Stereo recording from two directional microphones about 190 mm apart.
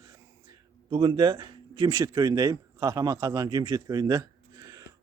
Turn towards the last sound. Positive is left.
turn(degrees=-15)  # may be behind; listen again after turning